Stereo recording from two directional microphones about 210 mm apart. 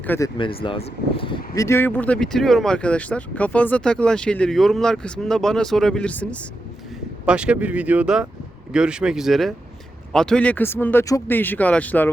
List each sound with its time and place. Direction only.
0.3 s speech: 25° left (ahead or behind)
1.5 s speech: 15° left (ahead or behind)
7.3 s speech: 5° right (ahead or behind)